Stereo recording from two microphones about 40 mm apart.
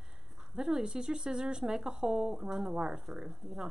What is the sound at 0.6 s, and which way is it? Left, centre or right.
Speech, centre.